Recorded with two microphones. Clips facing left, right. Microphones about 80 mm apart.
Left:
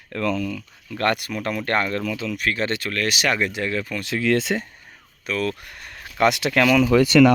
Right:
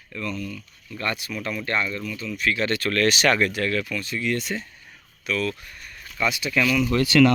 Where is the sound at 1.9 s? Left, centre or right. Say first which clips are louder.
Left 5 dB; left.